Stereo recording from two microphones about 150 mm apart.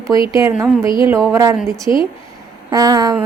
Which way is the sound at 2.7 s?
25° right (ahead or behind).